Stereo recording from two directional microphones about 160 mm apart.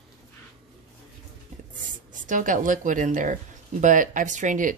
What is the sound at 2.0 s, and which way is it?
Speech, 55° right (ahead or behind).